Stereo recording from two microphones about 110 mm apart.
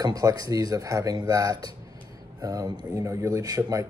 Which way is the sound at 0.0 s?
35° right (ahead or behind).